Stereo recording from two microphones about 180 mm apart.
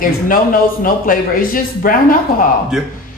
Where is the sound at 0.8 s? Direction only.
50° left (ahead or behind).